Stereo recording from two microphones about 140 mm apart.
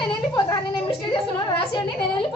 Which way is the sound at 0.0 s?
35° left (ahead or behind).